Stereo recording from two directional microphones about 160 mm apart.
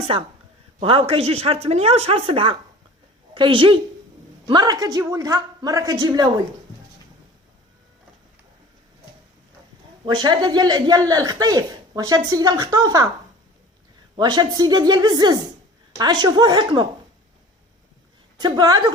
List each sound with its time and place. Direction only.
0.1 s speech: 35° right (ahead or behind)
10.1 s speech: 30° right (ahead or behind)
14.2 s speech: 25° right (ahead or behind)
18.3 s speech: 25° right (ahead or behind)